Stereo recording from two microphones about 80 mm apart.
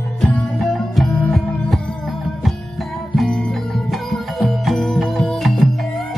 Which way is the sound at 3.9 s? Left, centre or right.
Centre.